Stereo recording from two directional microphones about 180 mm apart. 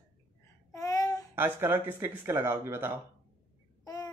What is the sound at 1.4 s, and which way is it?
Speech, 10° right (ahead or behind).